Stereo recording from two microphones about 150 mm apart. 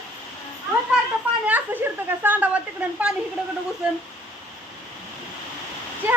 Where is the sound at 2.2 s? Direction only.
10° right (ahead or behind).